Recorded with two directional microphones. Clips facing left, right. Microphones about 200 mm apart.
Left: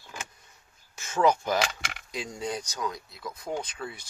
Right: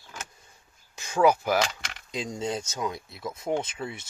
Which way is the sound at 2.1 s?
20° right (ahead or behind).